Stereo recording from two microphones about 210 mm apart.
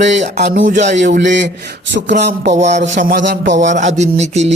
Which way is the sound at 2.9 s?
55° right (ahead or behind).